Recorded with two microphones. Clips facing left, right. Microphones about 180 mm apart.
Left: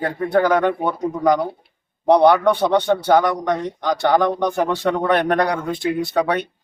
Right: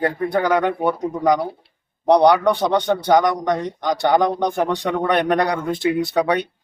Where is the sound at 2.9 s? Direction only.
15° right (ahead or behind).